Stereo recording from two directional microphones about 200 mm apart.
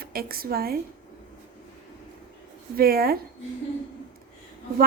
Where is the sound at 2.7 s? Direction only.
50° right (ahead or behind).